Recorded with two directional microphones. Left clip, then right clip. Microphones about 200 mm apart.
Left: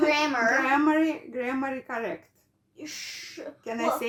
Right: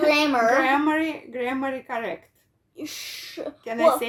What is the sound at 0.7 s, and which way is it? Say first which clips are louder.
Speech: right 1 dB; centre (ahead or behind).